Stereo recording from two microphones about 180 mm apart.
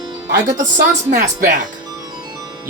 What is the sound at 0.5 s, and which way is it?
Speech, 45° right (ahead or behind).